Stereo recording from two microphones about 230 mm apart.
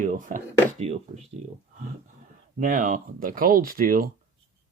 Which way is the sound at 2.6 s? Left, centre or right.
Right.